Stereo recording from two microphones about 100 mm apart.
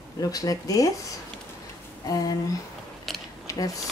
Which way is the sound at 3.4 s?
35° left (ahead or behind).